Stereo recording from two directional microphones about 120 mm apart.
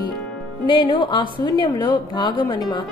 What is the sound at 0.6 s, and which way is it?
A woman's voice, 40° left (ahead or behind).